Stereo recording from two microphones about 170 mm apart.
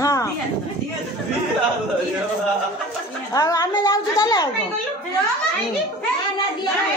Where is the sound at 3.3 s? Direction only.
20° left (ahead or behind).